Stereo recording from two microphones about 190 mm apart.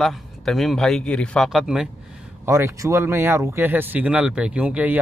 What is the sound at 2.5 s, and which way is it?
Speech, 15° right (ahead or behind).